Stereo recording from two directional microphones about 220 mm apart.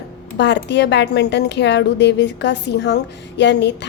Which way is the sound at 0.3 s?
55° left (ahead or behind).